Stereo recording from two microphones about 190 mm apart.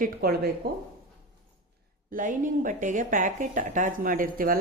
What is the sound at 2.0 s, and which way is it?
A woman's voice, 45° right (ahead or behind).